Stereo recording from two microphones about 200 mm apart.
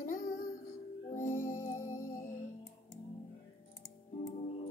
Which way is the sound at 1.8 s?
15° left (ahead or behind).